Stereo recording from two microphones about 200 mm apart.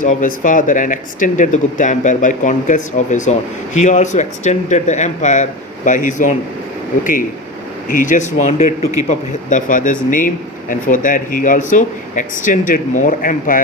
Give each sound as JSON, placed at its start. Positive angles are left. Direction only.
{"t": 0.0, "sound": "speech", "side_deg": 40}
{"t": 7.9, "sound": "speech", "side_deg": 40}